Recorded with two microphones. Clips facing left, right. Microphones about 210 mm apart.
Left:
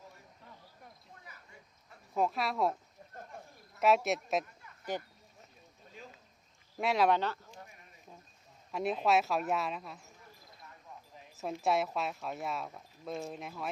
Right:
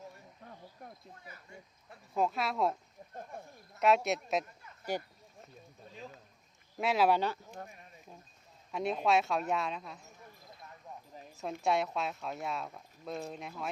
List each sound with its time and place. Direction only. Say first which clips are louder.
0.4 s cricket: right 5 dB; 50° right (ahead or behind)
2.1 s speech: even; centre (ahead or behind)
3.8 s speech: even; centre (ahead or behind)
4.9 s speech: right 2 dB; 10° right (ahead or behind)
6.7 s speech: even; centre (ahead or behind)
8.7 s speech: even; centre (ahead or behind)
11.6 s speech: even; centre (ahead or behind)